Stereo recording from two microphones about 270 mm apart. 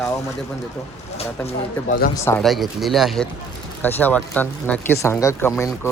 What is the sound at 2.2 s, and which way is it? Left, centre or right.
Speech, centre.